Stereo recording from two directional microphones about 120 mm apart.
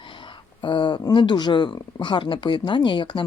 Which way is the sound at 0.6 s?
40° left (ahead or behind).